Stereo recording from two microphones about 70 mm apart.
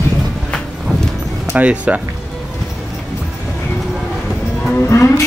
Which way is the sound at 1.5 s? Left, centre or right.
Right.